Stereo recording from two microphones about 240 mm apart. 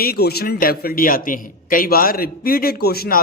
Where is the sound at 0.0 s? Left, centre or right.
Left.